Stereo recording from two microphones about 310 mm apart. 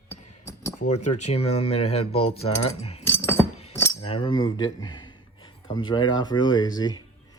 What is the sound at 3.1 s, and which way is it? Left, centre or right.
Keys jangling, centre.